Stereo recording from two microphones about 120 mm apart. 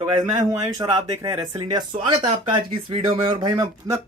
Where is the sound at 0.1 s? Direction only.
90° right.